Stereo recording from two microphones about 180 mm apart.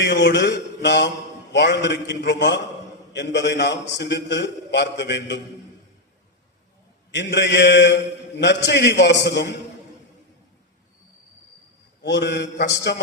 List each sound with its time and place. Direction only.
0.0 s a man's voice: 75° left (ahead or behind)
7.1 s a man's voice: 75° left (ahead or behind)
12.0 s a man's voice: 75° left (ahead or behind)